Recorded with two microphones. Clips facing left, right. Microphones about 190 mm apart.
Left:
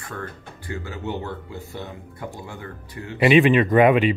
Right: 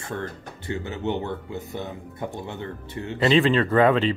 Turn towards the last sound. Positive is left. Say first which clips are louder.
# left 3 dB
turn(degrees=15)  # may be behind; listen again after turning